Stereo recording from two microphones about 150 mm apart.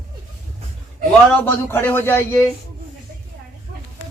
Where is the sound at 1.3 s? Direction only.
10° left (ahead or behind).